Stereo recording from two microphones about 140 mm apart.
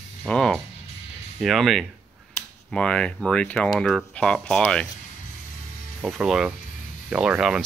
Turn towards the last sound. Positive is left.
turn(degrees=-5)  # may be behind; listen again after turning